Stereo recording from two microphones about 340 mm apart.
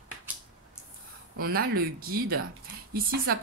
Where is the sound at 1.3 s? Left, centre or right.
Right.